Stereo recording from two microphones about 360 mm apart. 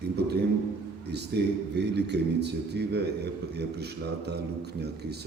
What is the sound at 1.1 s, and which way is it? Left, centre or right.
A man's voice, right.